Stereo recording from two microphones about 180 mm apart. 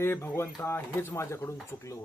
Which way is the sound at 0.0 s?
10° left (ahead or behind).